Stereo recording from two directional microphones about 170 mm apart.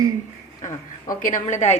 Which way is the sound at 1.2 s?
45° left (ahead or behind).